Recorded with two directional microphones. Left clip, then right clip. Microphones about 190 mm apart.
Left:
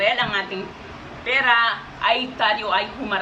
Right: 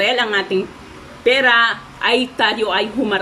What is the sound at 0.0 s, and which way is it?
A woman's voice, 45° right (ahead or behind).